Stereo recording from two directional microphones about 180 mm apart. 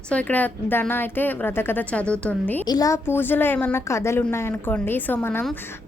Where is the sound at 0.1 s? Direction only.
10° left (ahead or behind).